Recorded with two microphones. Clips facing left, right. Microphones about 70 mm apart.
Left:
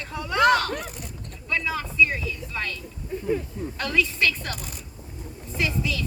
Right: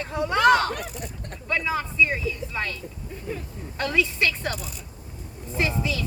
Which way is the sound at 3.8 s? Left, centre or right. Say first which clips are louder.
Right 1 dB; right.